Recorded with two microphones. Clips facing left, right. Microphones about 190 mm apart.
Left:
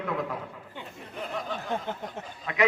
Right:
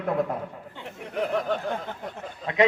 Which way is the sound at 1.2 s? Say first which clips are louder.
Right 8 dB; 65° right (ahead or behind).